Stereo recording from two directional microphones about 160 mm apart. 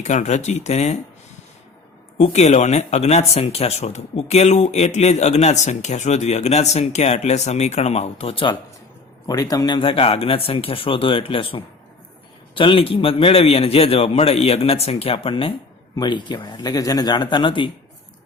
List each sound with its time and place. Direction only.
0.0 s speech: 50° left (ahead or behind)
2.1 s speech: 45° left (ahead or behind)
9.2 s a man's voice: 25° left (ahead or behind)